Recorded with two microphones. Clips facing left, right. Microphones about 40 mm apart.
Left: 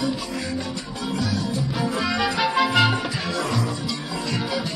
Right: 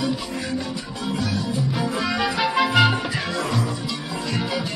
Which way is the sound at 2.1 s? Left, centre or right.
Centre.